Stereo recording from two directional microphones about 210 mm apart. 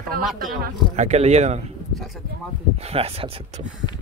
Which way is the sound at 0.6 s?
35° right (ahead or behind).